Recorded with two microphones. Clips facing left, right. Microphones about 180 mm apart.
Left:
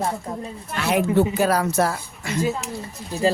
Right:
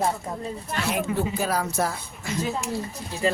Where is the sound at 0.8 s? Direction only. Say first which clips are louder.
Left 7 dB; 70° left (ahead or behind).